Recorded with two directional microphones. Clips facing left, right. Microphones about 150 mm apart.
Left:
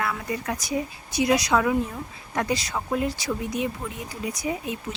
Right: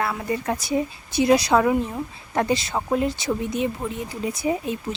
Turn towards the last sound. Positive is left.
turn(degrees=-30)  # may be behind; listen again after turning